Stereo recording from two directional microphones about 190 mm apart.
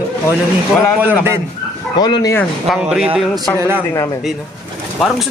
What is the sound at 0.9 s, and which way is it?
Speech, 10° right (ahead or behind).